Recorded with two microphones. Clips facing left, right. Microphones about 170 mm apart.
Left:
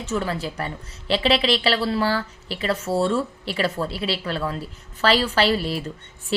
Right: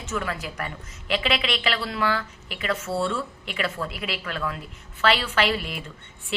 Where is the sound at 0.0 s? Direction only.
35° left (ahead or behind).